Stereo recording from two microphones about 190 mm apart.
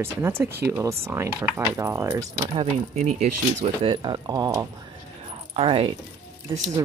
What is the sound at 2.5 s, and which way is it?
Speech, 35° right (ahead or behind).